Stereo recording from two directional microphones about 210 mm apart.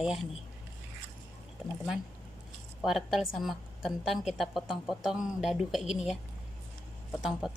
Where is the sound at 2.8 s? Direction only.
Centre (ahead or behind).